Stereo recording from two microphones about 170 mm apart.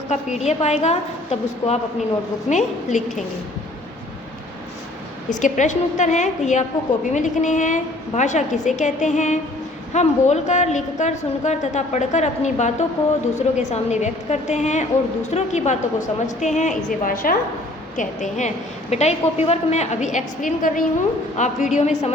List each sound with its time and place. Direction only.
0.1 s a woman's voice: 40° left (ahead or behind)
5.3 s a woman's voice: 45° left (ahead or behind)